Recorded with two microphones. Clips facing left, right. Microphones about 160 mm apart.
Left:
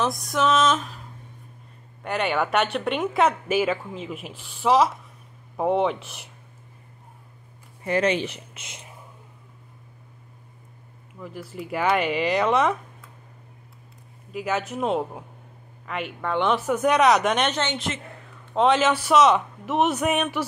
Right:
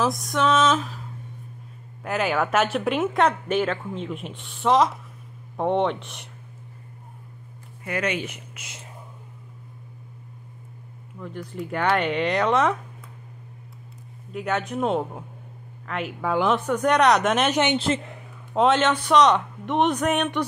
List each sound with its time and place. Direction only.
0.0 s speech: centre (ahead or behind)
2.0 s speech: centre (ahead or behind)
7.8 s speech: 30° left (ahead or behind)
11.1 s speech: 5° left (ahead or behind)
14.3 s speech: centre (ahead or behind)
17.7 s a woman's voice: 30° right (ahead or behind)
18.5 s speech: centre (ahead or behind)